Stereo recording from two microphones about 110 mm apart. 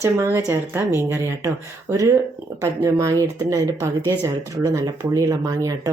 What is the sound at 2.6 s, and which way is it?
Speech, 25° right (ahead or behind).